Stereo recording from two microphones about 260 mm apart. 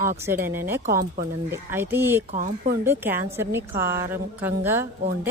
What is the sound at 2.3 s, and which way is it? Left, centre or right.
Speech, right.